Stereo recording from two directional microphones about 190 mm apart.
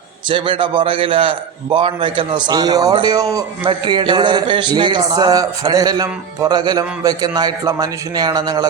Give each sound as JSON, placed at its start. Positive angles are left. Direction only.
{"t": 0.3, "sound": "a man's voice", "side_deg": -25}